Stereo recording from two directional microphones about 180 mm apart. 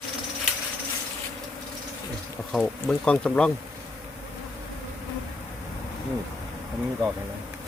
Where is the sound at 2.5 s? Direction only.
5° left (ahead or behind).